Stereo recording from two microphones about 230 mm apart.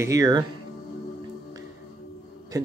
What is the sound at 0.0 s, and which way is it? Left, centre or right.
Speech, centre.